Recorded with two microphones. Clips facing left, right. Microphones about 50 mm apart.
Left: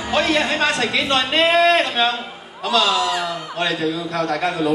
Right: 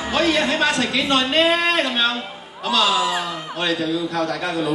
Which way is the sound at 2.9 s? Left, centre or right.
Centre.